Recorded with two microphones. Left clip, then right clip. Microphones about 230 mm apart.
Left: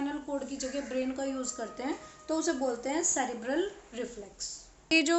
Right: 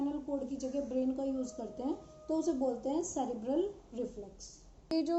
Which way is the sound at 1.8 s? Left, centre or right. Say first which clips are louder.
Left 3 dB; left.